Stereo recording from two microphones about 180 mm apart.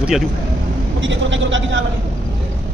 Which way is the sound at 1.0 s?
90° right.